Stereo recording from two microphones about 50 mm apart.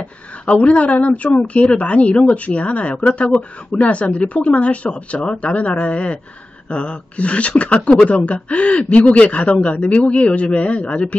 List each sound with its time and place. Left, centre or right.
0.0 s speech: left